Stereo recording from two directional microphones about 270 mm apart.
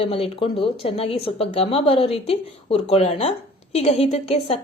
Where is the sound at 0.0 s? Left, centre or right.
Left.